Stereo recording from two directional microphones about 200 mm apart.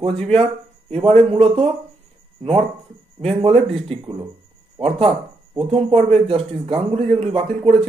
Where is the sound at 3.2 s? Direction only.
30° right (ahead or behind).